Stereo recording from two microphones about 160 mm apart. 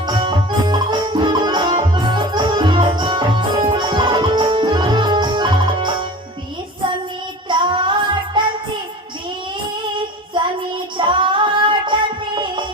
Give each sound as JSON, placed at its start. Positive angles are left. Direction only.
{"t": 0.1, "sound": "music", "side_deg": -30}
{"t": 7.4, "sound": "child singing", "side_deg": -30}
{"t": 10.3, "sound": "child singing", "side_deg": -30}
{"t": 10.9, "sound": "female singing", "side_deg": -30}